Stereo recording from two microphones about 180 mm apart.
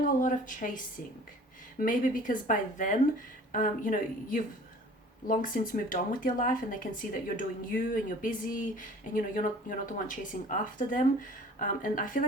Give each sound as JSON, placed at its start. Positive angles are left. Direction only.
{"t": 0.0, "sound": "speech", "side_deg": 45}
{"t": 1.8, "sound": "speech", "side_deg": 50}